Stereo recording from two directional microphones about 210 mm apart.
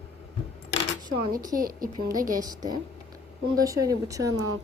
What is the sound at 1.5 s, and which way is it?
Speech, 45° right (ahead or behind).